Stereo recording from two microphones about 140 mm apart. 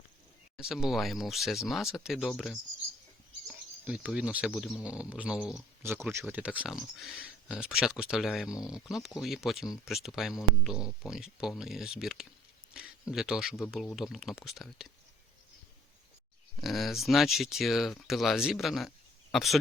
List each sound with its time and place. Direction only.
0.5 s speech: 5° right (ahead or behind)
3.8 s speech: 5° right (ahead or behind)
5.8 s speech: 20° right (ahead or behind); by 14.9 s centre (ahead or behind)
16.6 s speech: centre (ahead or behind)